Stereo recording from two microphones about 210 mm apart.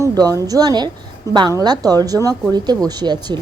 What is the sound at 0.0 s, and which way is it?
A woman's voice, 15° right (ahead or behind).